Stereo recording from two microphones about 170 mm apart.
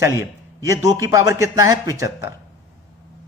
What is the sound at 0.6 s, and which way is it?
A man's voice, 20° right (ahead or behind).